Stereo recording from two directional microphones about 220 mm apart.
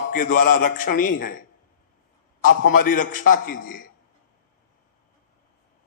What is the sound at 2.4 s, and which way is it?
A man's voice, 40° left (ahead or behind).